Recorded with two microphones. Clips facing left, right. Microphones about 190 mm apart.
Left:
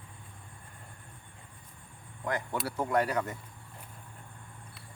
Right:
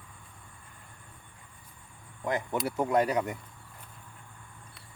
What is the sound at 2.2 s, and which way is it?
Speech, 20° right (ahead or behind).